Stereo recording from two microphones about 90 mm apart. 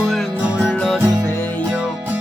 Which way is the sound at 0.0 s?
10° right (ahead or behind).